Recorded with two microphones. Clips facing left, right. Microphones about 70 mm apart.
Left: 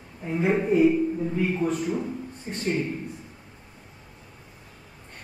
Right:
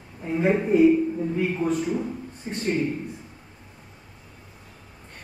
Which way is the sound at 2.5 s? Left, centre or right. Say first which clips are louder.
Right 4 dB; centre.